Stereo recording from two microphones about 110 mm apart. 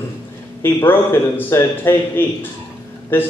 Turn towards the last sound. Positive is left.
turn(degrees=20)  # may be behind; listen again after turning